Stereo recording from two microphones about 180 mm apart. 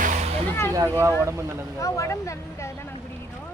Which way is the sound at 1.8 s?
15° left (ahead or behind).